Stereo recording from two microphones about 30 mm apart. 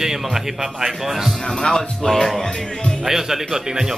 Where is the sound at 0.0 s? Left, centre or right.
Centre.